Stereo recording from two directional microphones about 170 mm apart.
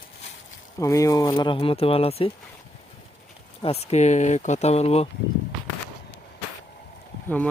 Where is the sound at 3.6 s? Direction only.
35° left (ahead or behind).